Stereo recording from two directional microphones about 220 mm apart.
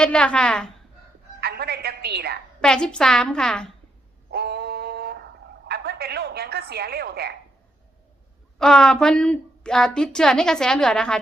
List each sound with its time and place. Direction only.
0.0 s a woman's voice: 5° left (ahead or behind)
1.4 s music: 45° right (ahead or behind)
2.6 s a woman's voice: 5° left (ahead or behind)
4.3 s a sound: 50° right (ahead or behind)
5.6 s a woman's voice: 45° right (ahead or behind)
8.5 s a woman's voice: 5° left (ahead or behind)